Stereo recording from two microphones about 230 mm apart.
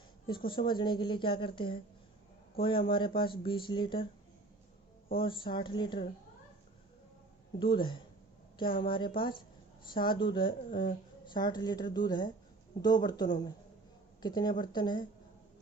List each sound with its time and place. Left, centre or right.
0.3 s speech: left
5.1 s speech: left
7.6 s speech: left